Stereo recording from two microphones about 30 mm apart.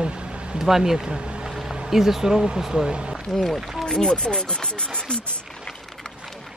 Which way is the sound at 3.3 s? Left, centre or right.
Centre.